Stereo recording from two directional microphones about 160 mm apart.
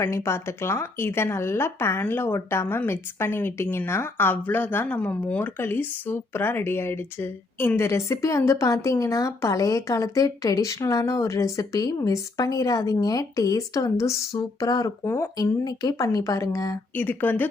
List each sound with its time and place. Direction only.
0.0 s speech: 15° left (ahead or behind)